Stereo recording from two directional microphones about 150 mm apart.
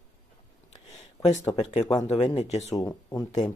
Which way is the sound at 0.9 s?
55° left (ahead or behind).